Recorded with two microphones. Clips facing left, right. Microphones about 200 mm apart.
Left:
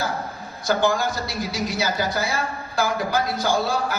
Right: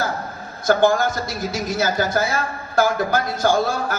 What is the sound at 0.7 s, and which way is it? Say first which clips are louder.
Speech: right 4 dB; 50° right (ahead or behind).